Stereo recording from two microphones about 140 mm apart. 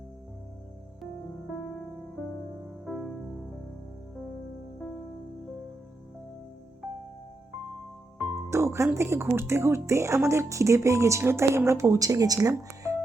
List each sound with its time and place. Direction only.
2.8 s music: 5° right (ahead or behind)
8.4 s music: 20° right (ahead or behind)
9.0 s speech: 20° right (ahead or behind)